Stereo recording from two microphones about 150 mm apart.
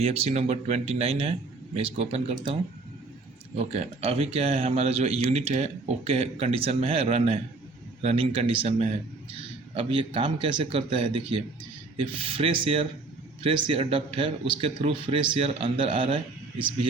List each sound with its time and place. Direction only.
0.0 s a man's voice: 45° right (ahead or behind)
3.6 s a man's voice: 45° right (ahead or behind)